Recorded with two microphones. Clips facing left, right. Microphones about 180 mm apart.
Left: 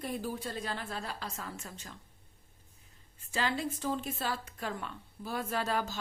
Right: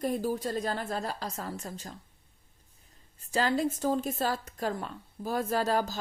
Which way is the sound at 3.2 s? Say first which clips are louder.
Right 6 dB; 40° right (ahead or behind).